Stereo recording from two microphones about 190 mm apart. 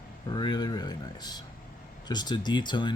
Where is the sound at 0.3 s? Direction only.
25° left (ahead or behind).